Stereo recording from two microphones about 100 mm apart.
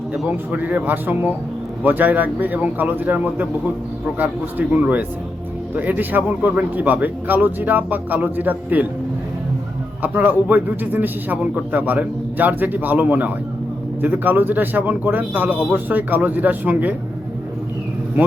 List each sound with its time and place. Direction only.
0.3 s a man's voice: 15° right (ahead or behind)
10.0 s a man's voice: 15° right (ahead or behind)